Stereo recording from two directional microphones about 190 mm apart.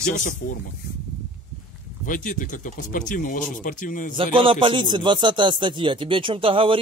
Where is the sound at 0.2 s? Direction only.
45° left (ahead or behind).